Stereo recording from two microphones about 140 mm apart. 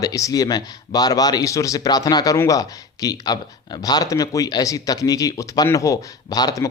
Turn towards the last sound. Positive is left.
turn(degrees=25)  # may be behind; listen again after turning